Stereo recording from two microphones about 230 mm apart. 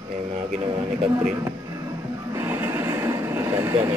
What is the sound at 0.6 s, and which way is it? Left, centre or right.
Speech, centre.